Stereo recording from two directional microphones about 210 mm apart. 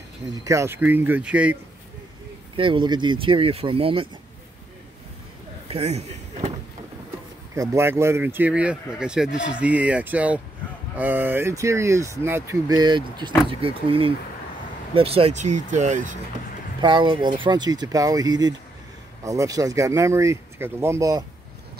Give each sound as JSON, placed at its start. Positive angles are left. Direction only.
{"t": 0.3, "sound": "speech", "side_deg": -15}
{"t": 2.5, "sound": "speech", "side_deg": -25}
{"t": 5.7, "sound": "a sound", "side_deg": -30}
{"t": 7.5, "sound": "speech", "side_deg": -15}
{"t": 16.8, "sound": "speech", "side_deg": -20}